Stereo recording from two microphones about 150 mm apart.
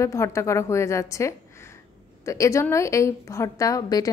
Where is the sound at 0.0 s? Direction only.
20° left (ahead or behind).